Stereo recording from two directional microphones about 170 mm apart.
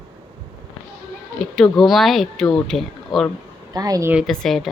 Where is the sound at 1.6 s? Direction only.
Centre (ahead or behind).